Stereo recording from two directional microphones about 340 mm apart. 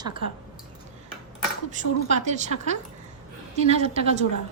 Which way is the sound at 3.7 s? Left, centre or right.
Centre.